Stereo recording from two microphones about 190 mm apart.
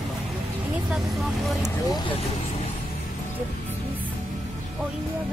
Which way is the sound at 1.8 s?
20° left (ahead or behind).